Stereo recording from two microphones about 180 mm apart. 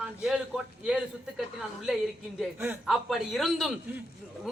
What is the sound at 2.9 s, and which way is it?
Speech, centre (ahead or behind).